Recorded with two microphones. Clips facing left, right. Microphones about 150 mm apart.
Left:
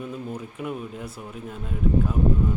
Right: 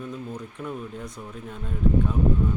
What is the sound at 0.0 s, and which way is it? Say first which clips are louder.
Speech: left 2 dB; 10° left (ahead or behind).